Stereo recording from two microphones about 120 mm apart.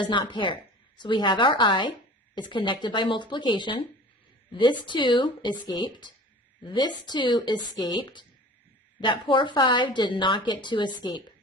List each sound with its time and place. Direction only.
0.0 s a woman's voice: 40° left (ahead or behind)